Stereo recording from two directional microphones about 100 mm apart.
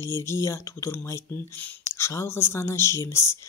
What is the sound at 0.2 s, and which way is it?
Speech, 30° left (ahead or behind).